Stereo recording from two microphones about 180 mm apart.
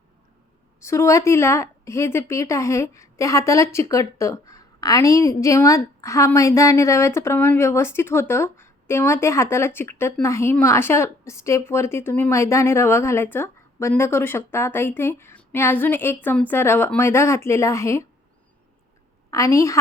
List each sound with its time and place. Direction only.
0.8 s a woman's voice: 15° left (ahead or behind)
19.3 s a woman's voice: 15° left (ahead or behind)